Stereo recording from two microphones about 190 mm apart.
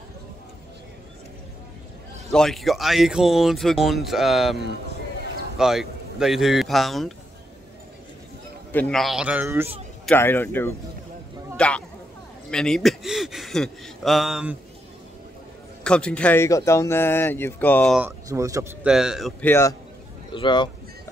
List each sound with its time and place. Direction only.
2.3 s speech: centre (ahead or behind)
5.6 s speech: centre (ahead or behind)
8.7 s speech: 5° left (ahead or behind); by 9.7 s 10° right (ahead or behind)
10.0 s speech: 10° left (ahead or behind)
11.5 s a sound: 5° left (ahead or behind)
12.4 s speech: 5° left (ahead or behind)
15.8 s speech: 5° left (ahead or behind)
17.9 s speech: 10° right (ahead or behind)
19.4 s speech: 10° left (ahead or behind)
20.3 s speech: 25° left (ahead or behind)